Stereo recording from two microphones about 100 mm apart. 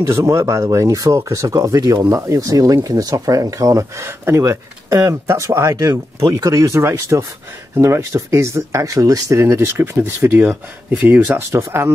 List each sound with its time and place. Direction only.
0.0 s speech: 35° right (ahead or behind)